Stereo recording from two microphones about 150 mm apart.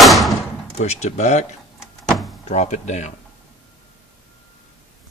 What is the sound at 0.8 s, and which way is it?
Speech, 50° left (ahead or behind).